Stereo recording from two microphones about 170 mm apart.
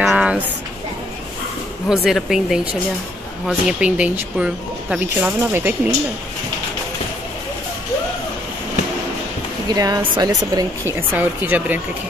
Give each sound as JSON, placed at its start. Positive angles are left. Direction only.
{"t": 0.0, "sound": "a sound", "side_deg": -5}
{"t": 1.9, "sound": "speech", "side_deg": 0}
{"t": 9.8, "sound": "speech", "side_deg": -20}
{"t": 11.0, "sound": "speech", "side_deg": -10}